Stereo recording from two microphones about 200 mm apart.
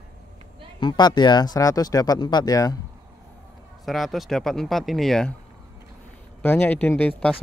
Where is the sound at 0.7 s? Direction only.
25° left (ahead or behind).